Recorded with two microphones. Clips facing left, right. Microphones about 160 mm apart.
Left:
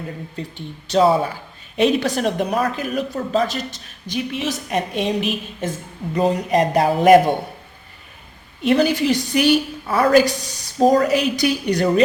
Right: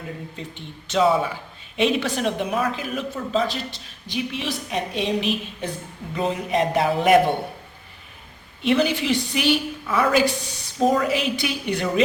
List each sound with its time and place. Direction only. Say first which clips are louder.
0.3 s a woman's voice: left 5 dB; 40° left (ahead or behind)
8.6 s a woman's voice: left 4 dB; 40° left (ahead or behind)